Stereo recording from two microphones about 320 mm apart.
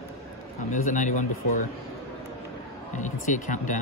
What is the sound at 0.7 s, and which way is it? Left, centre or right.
Speech, left.